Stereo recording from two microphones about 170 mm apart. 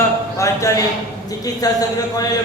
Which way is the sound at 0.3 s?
20° left (ahead or behind).